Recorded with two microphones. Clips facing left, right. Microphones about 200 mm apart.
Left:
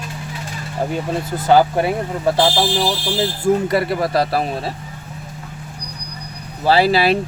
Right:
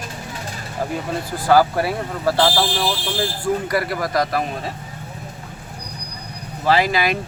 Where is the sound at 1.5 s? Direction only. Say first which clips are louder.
Left 2 dB; 20° left (ahead or behind).